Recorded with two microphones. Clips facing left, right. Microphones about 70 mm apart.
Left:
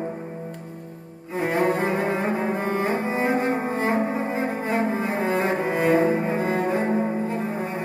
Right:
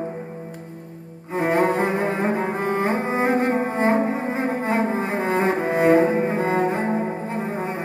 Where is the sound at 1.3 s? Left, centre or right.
Right.